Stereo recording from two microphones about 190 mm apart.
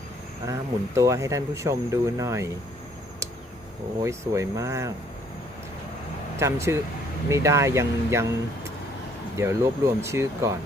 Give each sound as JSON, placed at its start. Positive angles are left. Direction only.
{"t": 0.4, "sound": "speech", "side_deg": -15}
{"t": 4.0, "sound": "speech", "side_deg": -15}
{"t": 6.3, "sound": "speech", "side_deg": -15}
{"t": 9.4, "sound": "speech", "side_deg": -15}